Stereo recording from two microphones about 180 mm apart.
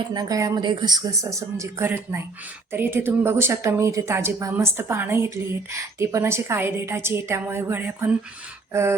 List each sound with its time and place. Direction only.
0.1 s a woman's voice: 20° right (ahead or behind)